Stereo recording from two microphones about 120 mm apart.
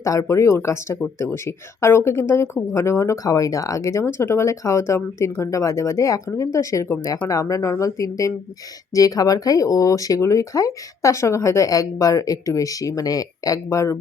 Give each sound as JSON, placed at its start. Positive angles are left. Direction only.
{"t": 0.0, "sound": "speech", "side_deg": 25}